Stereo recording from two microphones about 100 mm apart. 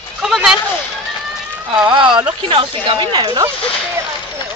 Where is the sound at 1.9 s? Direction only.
50° right (ahead or behind).